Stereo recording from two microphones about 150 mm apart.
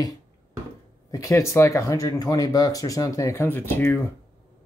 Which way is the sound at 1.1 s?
20° left (ahead or behind).